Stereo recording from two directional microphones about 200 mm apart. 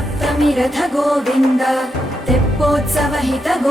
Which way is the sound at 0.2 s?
Centre (ahead or behind).